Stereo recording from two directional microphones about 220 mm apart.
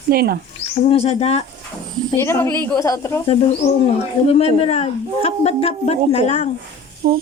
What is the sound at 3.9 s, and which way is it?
A woman's voice, 30° left (ahead or behind).